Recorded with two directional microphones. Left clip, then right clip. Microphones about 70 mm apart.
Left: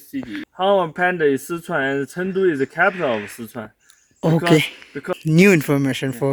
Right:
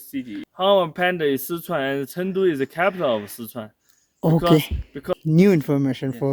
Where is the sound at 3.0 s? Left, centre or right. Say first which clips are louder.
Left 1 dB; right.